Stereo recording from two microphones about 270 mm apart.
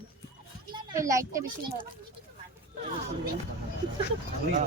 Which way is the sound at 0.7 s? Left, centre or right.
Centre.